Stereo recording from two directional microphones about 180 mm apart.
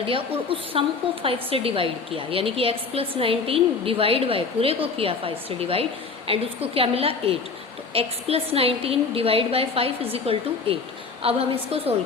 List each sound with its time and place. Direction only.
0.1 s a woman's voice: 30° right (ahead or behind)